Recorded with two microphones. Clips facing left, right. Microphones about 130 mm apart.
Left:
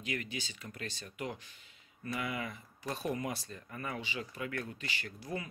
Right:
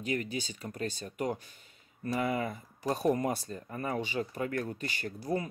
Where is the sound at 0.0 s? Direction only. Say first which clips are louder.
Right 6 dB; 40° right (ahead or behind).